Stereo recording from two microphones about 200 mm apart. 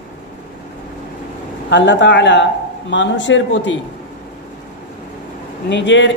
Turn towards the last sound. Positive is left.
turn(degrees=65)  # may be behind; listen again after turning